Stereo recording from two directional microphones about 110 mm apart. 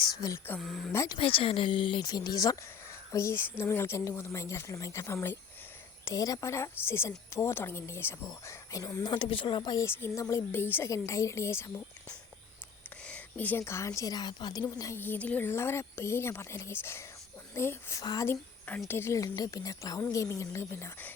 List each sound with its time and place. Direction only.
0.0 s speech: 35° left (ahead or behind)
0.6 s speech: centre (ahead or behind)
0.9 s speech: 35° left (ahead or behind)
1.2 s a woman's voice: 55° left (ahead or behind)
9.8 s a woman's voice: 25° left (ahead or behind)
13.1 s a woman's voice: 15° left (ahead or behind); by 14.9 s 35° left (ahead or behind)
14.9 s a woman's voice: 20° left (ahead or behind)
18.0 s speech: 35° left (ahead or behind)
18.3 s a woman's voice: 15° left (ahead or behind)